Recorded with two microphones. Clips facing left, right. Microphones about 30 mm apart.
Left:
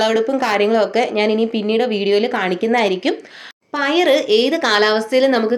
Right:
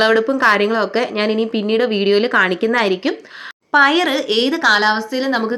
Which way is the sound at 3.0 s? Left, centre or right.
Centre.